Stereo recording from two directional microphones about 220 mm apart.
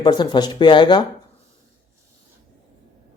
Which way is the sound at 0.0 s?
20° left (ahead or behind).